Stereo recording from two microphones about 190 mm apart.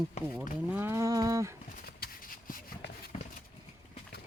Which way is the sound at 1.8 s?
50° left (ahead or behind).